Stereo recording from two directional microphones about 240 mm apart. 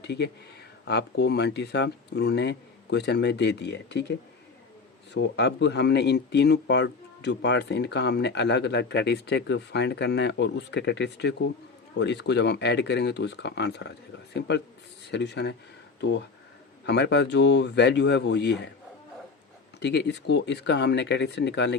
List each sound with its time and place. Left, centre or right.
0.0 s speech: left
5.1 s speech: left
19.8 s speech: left